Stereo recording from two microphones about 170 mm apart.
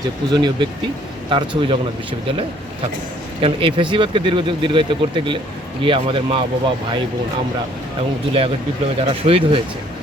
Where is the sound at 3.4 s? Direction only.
30° right (ahead or behind).